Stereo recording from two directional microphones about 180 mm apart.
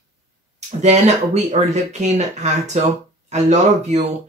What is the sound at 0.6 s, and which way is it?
Speech, 40° right (ahead or behind).